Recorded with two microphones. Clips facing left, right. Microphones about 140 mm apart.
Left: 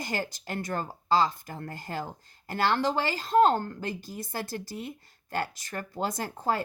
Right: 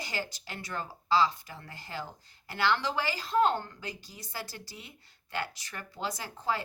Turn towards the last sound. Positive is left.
turn(degrees=45)  # may be behind; listen again after turning